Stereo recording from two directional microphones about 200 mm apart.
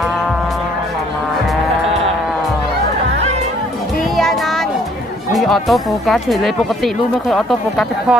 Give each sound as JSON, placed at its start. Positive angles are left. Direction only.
{"t": 4.2, "sound": "music", "side_deg": 0}
{"t": 5.3, "sound": "speech", "side_deg": 0}